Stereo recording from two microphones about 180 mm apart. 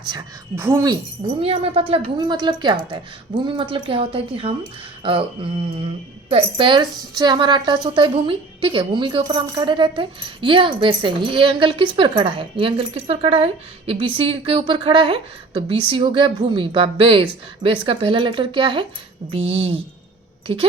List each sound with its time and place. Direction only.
0.5 s speech: 15° right (ahead or behind)
1.4 s a woman's voice: 35° right (ahead or behind)